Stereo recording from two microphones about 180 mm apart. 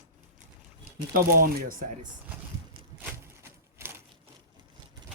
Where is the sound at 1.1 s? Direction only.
50° right (ahead or behind).